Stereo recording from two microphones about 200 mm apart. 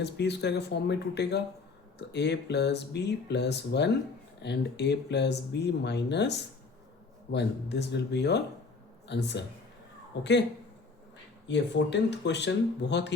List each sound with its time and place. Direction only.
0.0 s speech: 55° left (ahead or behind)
7.3 s speech: 60° left (ahead or behind)
11.4 s speech: 60° left (ahead or behind)